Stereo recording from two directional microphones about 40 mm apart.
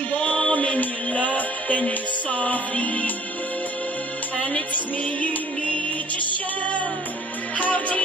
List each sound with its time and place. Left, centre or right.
0.1 s music: left
4.6 s music: left
7.5 s music: left